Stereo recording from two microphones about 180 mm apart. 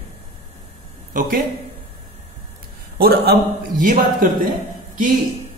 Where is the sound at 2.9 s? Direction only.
60° right (ahead or behind).